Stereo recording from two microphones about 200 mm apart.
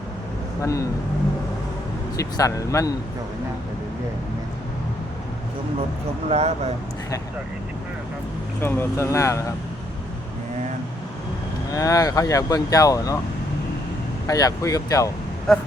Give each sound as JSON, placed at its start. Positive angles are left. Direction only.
{"t": 0.6, "sound": "speech", "side_deg": 15}
{"t": 2.1, "sound": "speech", "side_deg": 15}
{"t": 6.2, "sound": "speech", "side_deg": -30}
{"t": 8.6, "sound": "speech", "side_deg": 10}
{"t": 11.7, "sound": "speech", "side_deg": 15}
{"t": 14.3, "sound": "speech", "side_deg": 15}
{"t": 15.5, "sound": "speech", "side_deg": 0}